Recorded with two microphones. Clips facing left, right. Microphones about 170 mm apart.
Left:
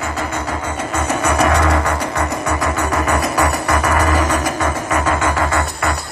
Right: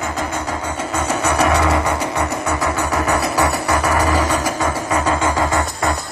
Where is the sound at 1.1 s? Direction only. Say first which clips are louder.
Left 1 dB; 10° left (ahead or behind).